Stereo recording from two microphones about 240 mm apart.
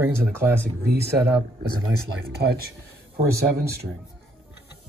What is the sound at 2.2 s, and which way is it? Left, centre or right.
Speech, right.